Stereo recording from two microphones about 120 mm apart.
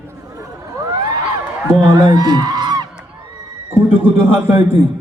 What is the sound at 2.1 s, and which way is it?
Honk, 35° right (ahead or behind).